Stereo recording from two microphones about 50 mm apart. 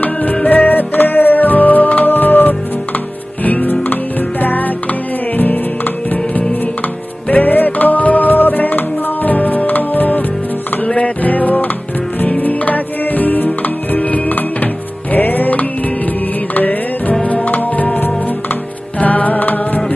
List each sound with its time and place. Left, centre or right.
0.0 s music: left
7.2 s music: left
17.5 s music: left